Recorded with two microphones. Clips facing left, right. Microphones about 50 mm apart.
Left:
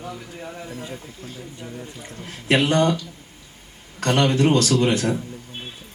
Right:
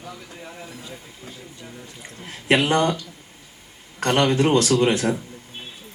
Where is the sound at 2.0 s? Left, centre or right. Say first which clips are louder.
Right 2 dB; right.